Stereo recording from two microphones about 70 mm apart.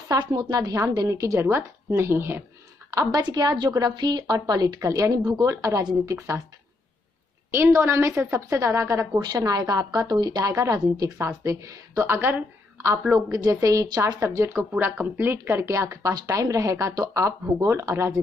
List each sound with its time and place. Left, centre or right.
0.2 s a woman's voice: right
1.0 s a woman's voice: right
2.9 s a woman's voice: right
3.2 s a woman's voice: right
7.5 s a woman's voice: right
9.4 s a woman's voice: right
9.9 s a woman's voice: right
10.5 s a woman's voice: right
12.1 s a woman's voice: right
13.3 s a woman's voice: right
13.8 s speech: right
14.2 s a woman's voice: right
14.6 s a woman's voice: right